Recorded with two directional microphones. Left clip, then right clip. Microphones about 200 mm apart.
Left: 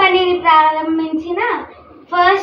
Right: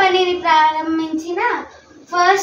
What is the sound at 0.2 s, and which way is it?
Child singing, 15° right (ahead or behind).